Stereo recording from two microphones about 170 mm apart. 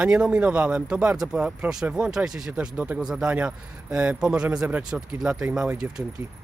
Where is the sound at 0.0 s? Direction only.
5° right (ahead or behind).